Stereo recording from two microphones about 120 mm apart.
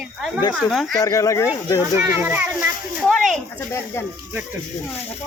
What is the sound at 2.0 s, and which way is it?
Speech, 25° right (ahead or behind).